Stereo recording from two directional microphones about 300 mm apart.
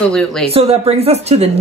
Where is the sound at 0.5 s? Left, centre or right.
Centre.